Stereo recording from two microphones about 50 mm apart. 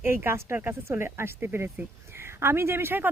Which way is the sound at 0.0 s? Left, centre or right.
Right.